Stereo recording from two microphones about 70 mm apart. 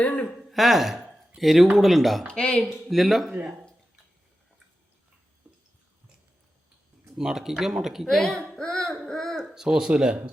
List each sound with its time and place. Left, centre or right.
0.0 s a sound: centre
0.5 s speech: centre
2.2 s speech: centre
2.9 s speech: centre
7.2 s speech: centre
9.3 s speech: centre